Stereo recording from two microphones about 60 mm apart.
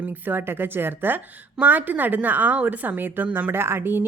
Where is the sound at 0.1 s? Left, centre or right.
Right.